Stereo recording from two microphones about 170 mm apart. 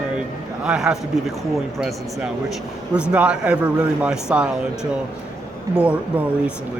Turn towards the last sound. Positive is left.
turn(degrees=-5)  # may be behind; listen again after turning